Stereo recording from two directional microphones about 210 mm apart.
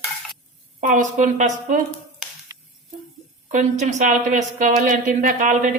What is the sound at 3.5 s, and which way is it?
A woman's voice, 35° right (ahead or behind).